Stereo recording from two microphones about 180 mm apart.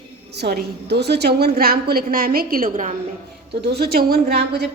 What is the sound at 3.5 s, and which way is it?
A woman's voice, 65° right (ahead or behind).